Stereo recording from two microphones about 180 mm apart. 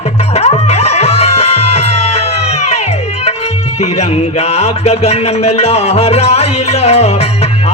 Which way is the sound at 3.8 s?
35° left (ahead or behind).